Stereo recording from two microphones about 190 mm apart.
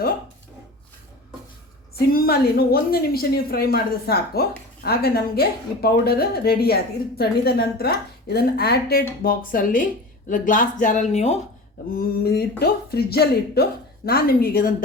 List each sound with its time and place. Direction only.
2.0 s speech: 55° left (ahead or behind); by 11.3 s 35° left (ahead or behind)
11.9 s speech: 55° left (ahead or behind)